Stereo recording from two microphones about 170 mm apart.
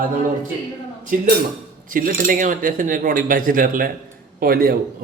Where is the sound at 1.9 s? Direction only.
55° right (ahead or behind).